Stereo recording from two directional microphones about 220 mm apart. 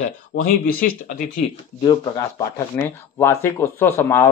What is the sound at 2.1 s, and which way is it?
Speech, 10° left (ahead or behind).